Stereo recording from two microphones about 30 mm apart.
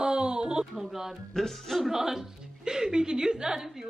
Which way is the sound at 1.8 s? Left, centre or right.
Centre.